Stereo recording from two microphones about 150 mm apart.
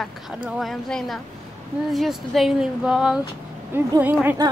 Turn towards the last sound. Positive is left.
turn(degrees=-10)  # may be behind; listen again after turning